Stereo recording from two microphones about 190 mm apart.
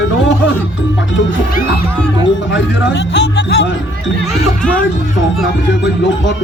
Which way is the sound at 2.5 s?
70° left (ahead or behind).